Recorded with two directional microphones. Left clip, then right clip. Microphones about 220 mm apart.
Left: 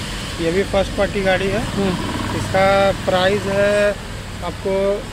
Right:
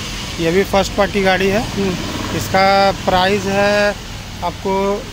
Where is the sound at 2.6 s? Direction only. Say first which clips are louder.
Right 2 dB; 45° right (ahead or behind).